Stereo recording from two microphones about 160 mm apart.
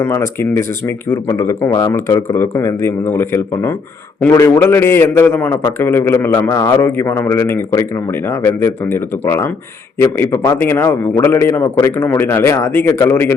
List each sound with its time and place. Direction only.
0.0 s speech: 15° left (ahead or behind)